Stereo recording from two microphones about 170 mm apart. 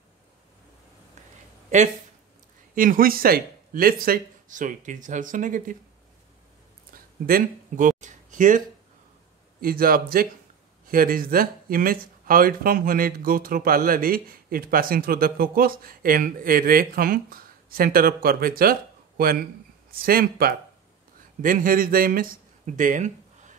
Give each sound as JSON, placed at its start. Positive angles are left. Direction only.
{"t": 1.7, "sound": "speech", "side_deg": -45}
{"t": 6.9, "sound": "a sound", "side_deg": -60}
{"t": 9.6, "sound": "speech", "side_deg": -60}